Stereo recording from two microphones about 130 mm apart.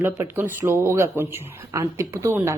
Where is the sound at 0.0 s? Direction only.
20° right (ahead or behind).